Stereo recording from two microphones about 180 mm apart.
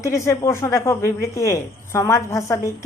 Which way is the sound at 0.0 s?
15° left (ahead or behind).